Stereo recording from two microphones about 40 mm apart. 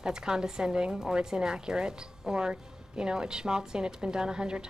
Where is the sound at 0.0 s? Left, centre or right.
Centre.